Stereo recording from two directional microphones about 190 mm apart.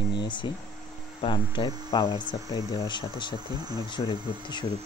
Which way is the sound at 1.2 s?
25° left (ahead or behind).